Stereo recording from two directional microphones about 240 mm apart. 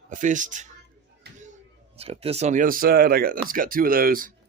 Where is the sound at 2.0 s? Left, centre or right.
Right.